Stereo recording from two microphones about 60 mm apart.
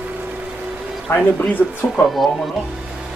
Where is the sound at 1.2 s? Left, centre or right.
Left.